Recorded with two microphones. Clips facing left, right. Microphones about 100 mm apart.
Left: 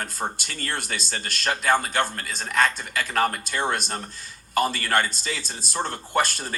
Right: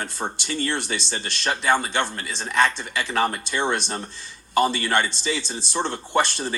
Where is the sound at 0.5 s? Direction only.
25° right (ahead or behind).